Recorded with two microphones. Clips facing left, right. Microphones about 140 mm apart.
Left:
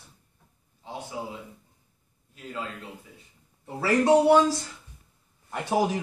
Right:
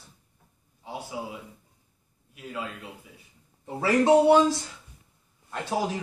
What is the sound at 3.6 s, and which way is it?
Speech, 25° right (ahead or behind).